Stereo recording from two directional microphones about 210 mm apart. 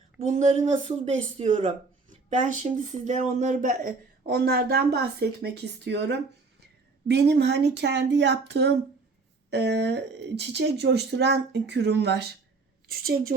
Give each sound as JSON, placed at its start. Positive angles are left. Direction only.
{"t": 0.2, "sound": "speech", "side_deg": -30}